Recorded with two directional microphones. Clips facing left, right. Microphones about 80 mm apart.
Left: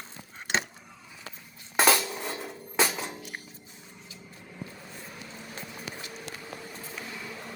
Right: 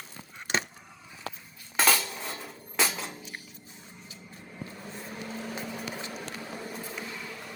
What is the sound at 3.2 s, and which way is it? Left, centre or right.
Dishes, left.